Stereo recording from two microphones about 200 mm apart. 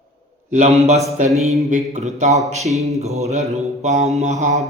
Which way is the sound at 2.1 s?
35° right (ahead or behind).